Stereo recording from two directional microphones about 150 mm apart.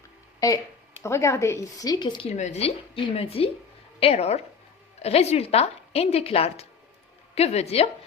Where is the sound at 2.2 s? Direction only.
50° left (ahead or behind).